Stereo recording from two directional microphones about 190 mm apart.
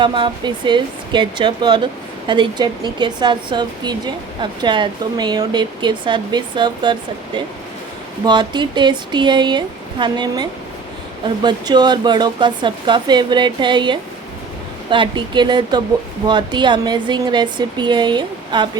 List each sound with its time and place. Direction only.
0.0 s speech: 25° right (ahead or behind)
8.2 s speech: 20° right (ahead or behind)